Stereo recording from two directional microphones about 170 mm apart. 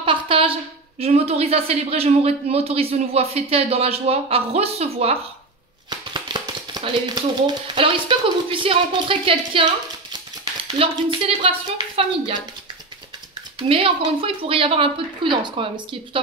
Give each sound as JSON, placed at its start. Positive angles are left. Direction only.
{"t": 0.0, "sound": "a woman's voice", "side_deg": -30}
{"t": 5.9, "sound": "a woman's voice", "side_deg": -25}
{"t": 13.7, "sound": "a woman's voice", "side_deg": -30}